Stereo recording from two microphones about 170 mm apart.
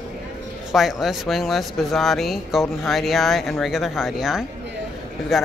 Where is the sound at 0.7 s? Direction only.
Centre (ahead or behind).